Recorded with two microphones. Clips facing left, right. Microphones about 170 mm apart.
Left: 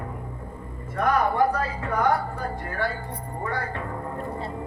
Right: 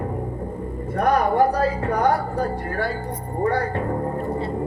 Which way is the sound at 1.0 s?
35° right (ahead or behind).